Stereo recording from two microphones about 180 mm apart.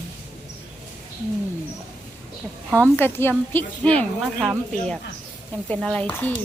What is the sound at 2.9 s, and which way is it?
Speech, 10° left (ahead or behind).